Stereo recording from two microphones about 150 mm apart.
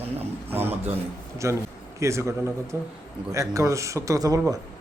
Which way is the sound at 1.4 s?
20° right (ahead or behind).